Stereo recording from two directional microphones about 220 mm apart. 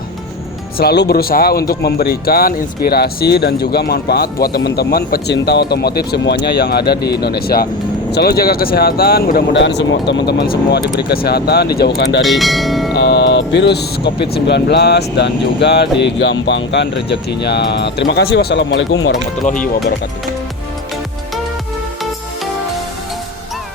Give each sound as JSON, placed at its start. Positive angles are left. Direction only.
{"t": 0.8, "sound": "speech", "side_deg": 45}
{"t": 12.2, "sound": "speech", "side_deg": 0}
{"t": 12.9, "sound": "speech", "side_deg": 50}